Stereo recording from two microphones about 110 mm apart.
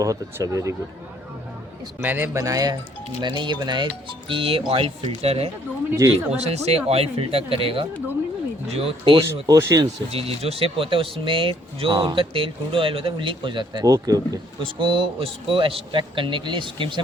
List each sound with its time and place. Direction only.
0.0 s speech: 30° right (ahead or behind)
2.0 s a man's voice: 15° right (ahead or behind)
2.4 s speech: 35° right (ahead or behind)
4.3 s speech: 55° right (ahead or behind)
9.2 s speech: 25° right (ahead or behind)
10.1 s speech: 65° right (ahead or behind); by 14.3 s 35° right (ahead or behind)
14.6 s speech: 50° right (ahead or behind)